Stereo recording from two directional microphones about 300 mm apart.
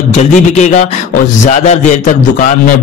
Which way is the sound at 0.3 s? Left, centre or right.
Left.